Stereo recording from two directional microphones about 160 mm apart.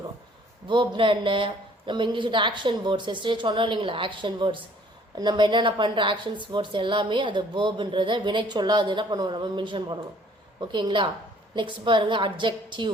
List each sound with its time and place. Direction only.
0.7 s a woman's voice: 30° right (ahead or behind)